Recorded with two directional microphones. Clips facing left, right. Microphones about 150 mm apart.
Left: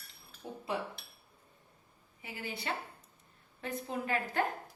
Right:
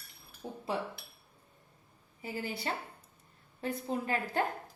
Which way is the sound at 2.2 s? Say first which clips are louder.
Right 3 dB; 40° right (ahead or behind).